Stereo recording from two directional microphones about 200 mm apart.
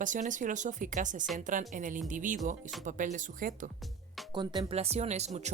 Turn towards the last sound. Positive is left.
turn(degrees=-35)  # may be behind; listen again after turning